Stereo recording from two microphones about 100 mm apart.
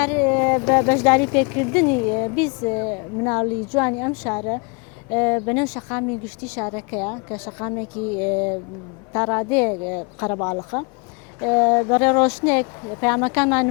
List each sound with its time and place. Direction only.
0.0 s speech: 20° left (ahead or behind)
9.1 s speech: 25° left (ahead or behind)